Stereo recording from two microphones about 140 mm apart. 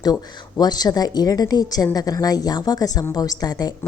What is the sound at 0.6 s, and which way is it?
A woman's voice, 30° left (ahead or behind).